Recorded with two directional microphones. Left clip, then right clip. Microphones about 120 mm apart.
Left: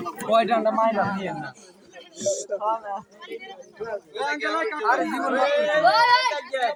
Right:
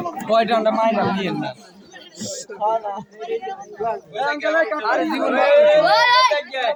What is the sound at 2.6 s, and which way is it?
Speech, centre (ahead or behind).